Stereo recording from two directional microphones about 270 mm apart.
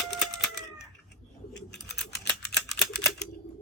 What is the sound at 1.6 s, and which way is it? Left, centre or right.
Bird, left.